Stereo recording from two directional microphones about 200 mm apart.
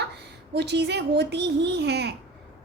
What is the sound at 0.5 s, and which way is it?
A woman's voice, 55° right (ahead or behind).